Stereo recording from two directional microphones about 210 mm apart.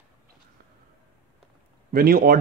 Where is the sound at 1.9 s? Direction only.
45° right (ahead or behind).